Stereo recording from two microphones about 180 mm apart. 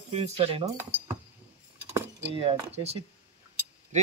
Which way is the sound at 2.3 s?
35° right (ahead or behind).